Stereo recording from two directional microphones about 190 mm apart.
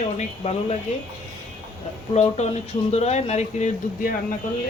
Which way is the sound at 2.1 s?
35° left (ahead or behind).